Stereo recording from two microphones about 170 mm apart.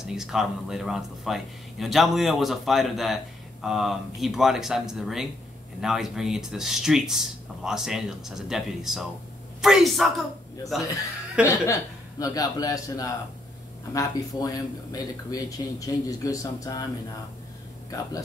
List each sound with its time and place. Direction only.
0.0 s speech: 5° right (ahead or behind)
11.4 s speech: 15° left (ahead or behind)